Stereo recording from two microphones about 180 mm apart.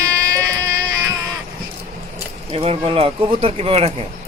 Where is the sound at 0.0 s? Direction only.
20° right (ahead or behind).